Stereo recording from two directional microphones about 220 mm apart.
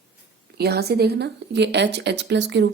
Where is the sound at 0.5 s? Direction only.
45° right (ahead or behind).